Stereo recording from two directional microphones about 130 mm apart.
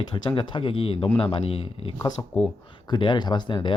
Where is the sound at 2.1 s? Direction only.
30° left (ahead or behind).